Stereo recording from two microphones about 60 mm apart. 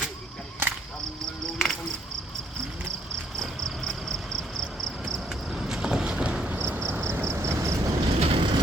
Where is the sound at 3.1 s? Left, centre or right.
Centre.